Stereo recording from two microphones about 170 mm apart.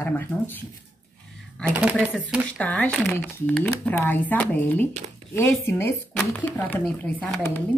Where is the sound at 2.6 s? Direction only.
10° left (ahead or behind).